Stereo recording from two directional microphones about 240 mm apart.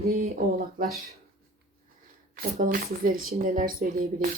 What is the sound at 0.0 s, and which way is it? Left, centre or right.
Speech, right.